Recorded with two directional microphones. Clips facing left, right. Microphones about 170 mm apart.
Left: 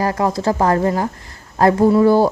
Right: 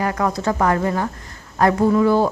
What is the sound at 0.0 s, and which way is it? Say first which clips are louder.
A woman's voice: left 3 dB; 30° left (ahead or behind).